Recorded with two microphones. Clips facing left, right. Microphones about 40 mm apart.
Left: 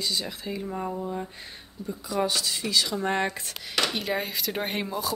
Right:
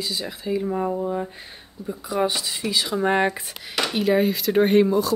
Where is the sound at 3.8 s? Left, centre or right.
Centre.